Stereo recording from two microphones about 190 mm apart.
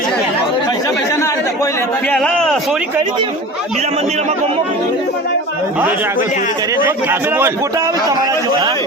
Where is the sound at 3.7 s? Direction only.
35° right (ahead or behind).